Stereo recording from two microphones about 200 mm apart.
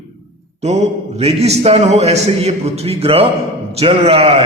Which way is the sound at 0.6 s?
35° right (ahead or behind).